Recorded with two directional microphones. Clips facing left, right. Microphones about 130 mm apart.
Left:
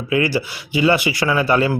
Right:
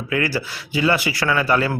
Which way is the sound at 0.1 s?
20° left (ahead or behind).